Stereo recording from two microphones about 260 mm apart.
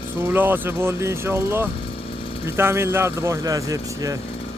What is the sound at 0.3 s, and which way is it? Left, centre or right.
Speech, centre.